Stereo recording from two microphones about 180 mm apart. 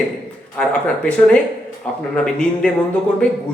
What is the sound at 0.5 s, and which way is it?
Speech, 5° left (ahead or behind).